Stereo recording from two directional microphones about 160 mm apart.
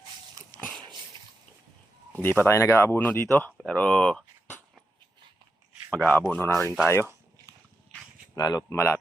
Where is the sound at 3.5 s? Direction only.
5° left (ahead or behind).